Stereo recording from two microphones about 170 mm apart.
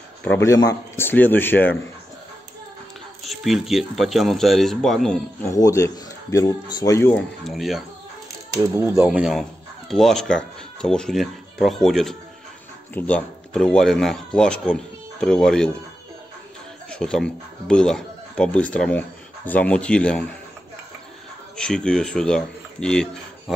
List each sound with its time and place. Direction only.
0.2 s a man's voice: 15° left (ahead or behind)
3.3 s speech: centre (ahead or behind)
5.4 s a man's voice: 20° left (ahead or behind); by 7.8 s centre (ahead or behind)
8.5 s speech: 15° right (ahead or behind); by 15.7 s 5° left (ahead or behind)
16.9 s speech: 5° left (ahead or behind)
21.5 s speech: 5° left (ahead or behind)